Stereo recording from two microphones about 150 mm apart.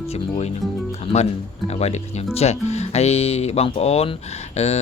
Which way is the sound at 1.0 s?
45° left (ahead or behind).